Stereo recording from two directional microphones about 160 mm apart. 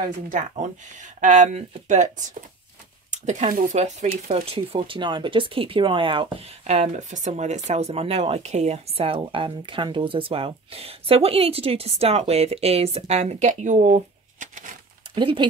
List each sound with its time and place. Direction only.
0.3 s speech: 50° right (ahead or behind)
4.3 s speech: 35° right (ahead or behind)
6.6 s speech: 45° right (ahead or behind)
15.1 s speech: 30° right (ahead or behind)